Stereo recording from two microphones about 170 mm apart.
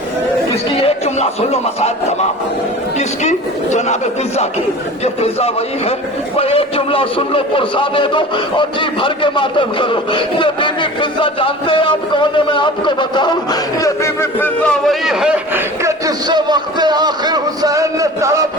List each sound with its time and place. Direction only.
0.8 s a sound: 35° left (ahead or behind)
3.0 s a man's voice: 45° left (ahead or behind)
5.0 s a man's voice: 35° left (ahead or behind); by 15.6 s 5° right (ahead or behind)
15.8 s a man's voice: 20° right (ahead or behind)